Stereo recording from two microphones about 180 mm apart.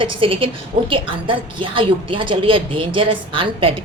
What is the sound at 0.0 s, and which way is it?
A woman's voice, 30° right (ahead or behind).